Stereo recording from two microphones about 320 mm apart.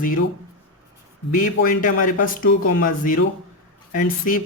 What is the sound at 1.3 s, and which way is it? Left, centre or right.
Speech, left.